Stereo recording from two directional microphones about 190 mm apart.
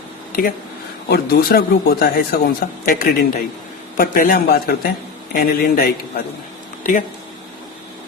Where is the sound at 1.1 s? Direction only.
55° left (ahead or behind).